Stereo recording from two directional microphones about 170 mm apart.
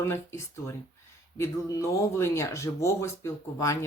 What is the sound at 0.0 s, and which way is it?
Speech, 15° left (ahead or behind).